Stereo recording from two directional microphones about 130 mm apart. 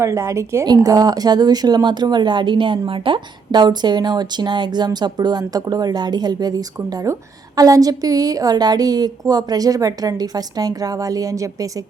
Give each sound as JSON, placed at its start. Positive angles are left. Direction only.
{"t": 0.0, "sound": "a woman's voice", "side_deg": -25}